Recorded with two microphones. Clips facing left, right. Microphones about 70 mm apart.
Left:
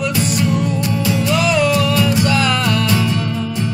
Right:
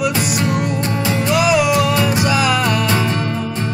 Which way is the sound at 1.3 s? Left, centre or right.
Centre.